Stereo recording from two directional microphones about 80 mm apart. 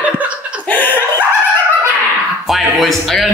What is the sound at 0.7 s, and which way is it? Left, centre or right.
Chuckle, left.